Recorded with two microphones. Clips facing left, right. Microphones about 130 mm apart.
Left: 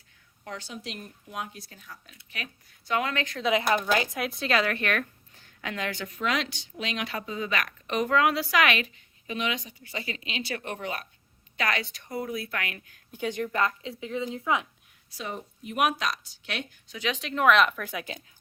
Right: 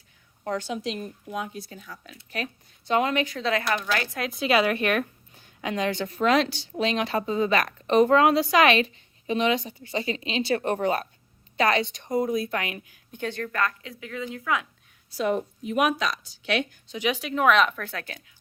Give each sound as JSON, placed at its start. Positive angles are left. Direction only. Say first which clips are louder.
{"t": 0.4, "sound": "a woman's voice", "louder": "right 10 dB", "side_deg": -40}
{"t": 2.1, "sound": "a woman's voice", "louder": "right 9 dB", "side_deg": -30}
{"t": 3.4, "sound": "speech", "louder": "left 1 dB", "side_deg": 15}
{"t": 4.2, "sound": "a woman's voice", "louder": "right 4 dB", "side_deg": 0}
{"t": 6.1, "sound": "a woman's voice", "louder": "right 8 dB", "side_deg": -40}
{"t": 13.1, "sound": "speech", "louder": "left 1 dB", "side_deg": 10}
{"t": 15.2, "sound": "speech", "louder": "right 11 dB", "side_deg": -65}
{"t": 16.4, "sound": "a woman's voice", "louder": "right 13 dB", "side_deg": -90}
{"t": 16.9, "sound": "speech", "louder": "right 4 dB", "side_deg": -15}
{"t": 17.2, "sound": "speech", "louder": "even", "side_deg": -5}